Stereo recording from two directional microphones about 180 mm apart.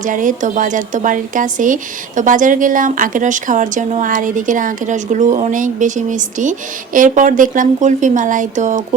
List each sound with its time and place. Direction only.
0.0 s speech: 45° right (ahead or behind)